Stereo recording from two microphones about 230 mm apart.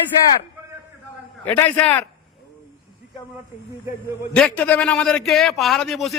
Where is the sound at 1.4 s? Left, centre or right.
Centre.